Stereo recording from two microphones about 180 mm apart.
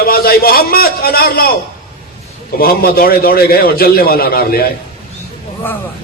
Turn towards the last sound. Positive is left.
turn(degrees=10)  # may be behind; listen again after turning